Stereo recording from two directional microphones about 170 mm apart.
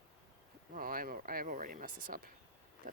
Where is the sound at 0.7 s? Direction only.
60° right (ahead or behind).